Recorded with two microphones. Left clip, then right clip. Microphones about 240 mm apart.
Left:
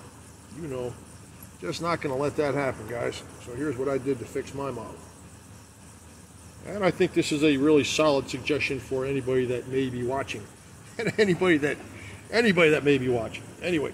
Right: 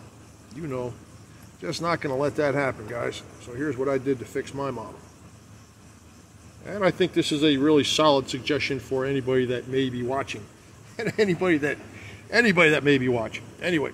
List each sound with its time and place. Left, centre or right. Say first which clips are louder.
1.6 s speech: right 2 dB; centre
6.6 s speech: right 1 dB; centre
11.0 s a man's voice: even; centre
12.3 s a man's voice: right 2 dB; centre